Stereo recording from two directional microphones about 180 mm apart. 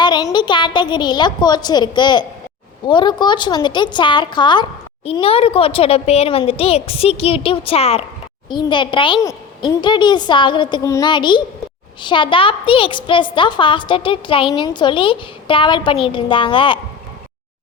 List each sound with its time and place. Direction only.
0.0 s a woman's voice: 25° left (ahead or behind)